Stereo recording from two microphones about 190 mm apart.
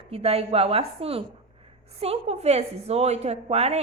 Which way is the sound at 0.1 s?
30° right (ahead or behind).